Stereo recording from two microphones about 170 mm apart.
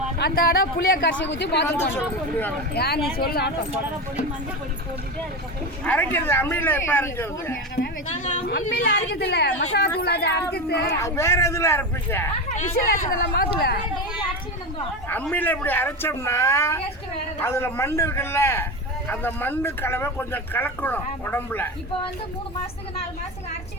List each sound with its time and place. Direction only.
0.2 s a woman's voice: 60° left (ahead or behind)
1.3 s speech: 85° left
2.7 s a woman's voice: 70° left (ahead or behind)
5.8 s speech: 10° left (ahead or behind)
8.6 s speech: 60° left (ahead or behind); by 10.8 s 80° left
10.8 s speech: 15° left (ahead or behind)
12.5 s a woman's voice: 50° left (ahead or behind)
15.1 s speech: 10° left (ahead or behind)